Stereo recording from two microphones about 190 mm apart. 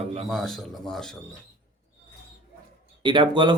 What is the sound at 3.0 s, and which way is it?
Speech, 25° right (ahead or behind).